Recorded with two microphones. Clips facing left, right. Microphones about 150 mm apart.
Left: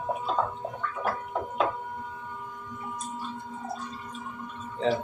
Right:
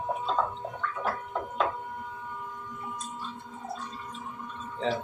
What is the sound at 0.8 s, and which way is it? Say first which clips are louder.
Gargling: left 1 dB; 5° left (ahead or behind).